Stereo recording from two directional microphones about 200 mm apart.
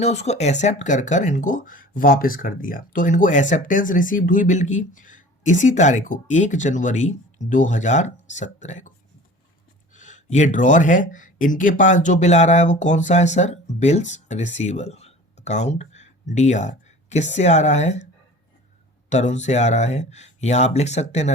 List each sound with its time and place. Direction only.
0.0 s speech: 35° left (ahead or behind)
9.9 s speech: 40° left (ahead or behind)
19.1 s speech: 35° left (ahead or behind)